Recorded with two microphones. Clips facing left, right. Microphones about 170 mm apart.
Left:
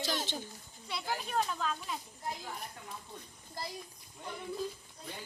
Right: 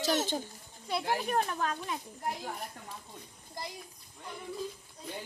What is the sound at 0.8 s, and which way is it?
Speech, 50° right (ahead or behind).